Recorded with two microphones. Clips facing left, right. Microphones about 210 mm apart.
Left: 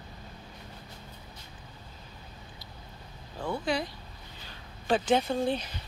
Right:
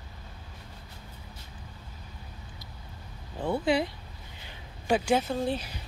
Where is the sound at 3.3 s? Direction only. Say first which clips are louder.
Right 4 dB; 20° right (ahead or behind).